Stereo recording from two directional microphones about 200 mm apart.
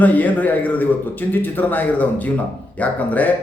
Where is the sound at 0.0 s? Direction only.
10° left (ahead or behind).